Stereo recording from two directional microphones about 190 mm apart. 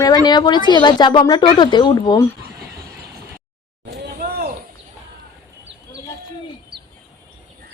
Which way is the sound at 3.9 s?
55° right (ahead or behind).